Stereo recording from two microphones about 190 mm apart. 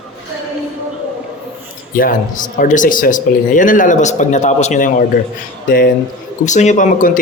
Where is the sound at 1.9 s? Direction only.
45° left (ahead or behind).